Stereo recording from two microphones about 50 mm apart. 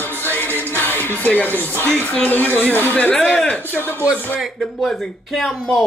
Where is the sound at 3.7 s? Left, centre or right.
Left.